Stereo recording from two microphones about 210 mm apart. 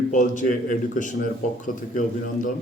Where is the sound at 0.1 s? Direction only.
40° left (ahead or behind).